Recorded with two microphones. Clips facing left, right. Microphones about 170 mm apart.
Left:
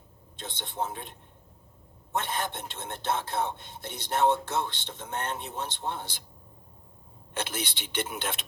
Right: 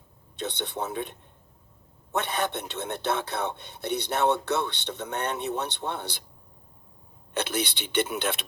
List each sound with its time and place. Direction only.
0.3 s speech: 70° right (ahead or behind)
2.1 s speech: 70° right (ahead or behind)
7.3 s speech: 70° right (ahead or behind)